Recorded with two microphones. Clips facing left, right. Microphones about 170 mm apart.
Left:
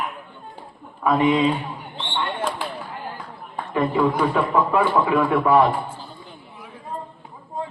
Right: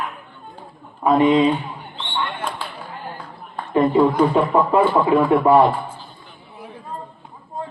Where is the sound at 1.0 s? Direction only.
25° right (ahead or behind).